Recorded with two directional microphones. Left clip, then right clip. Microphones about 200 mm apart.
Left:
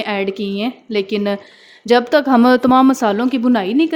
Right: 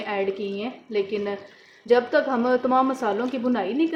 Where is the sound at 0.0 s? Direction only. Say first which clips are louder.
Left 6 dB; 55° left (ahead or behind).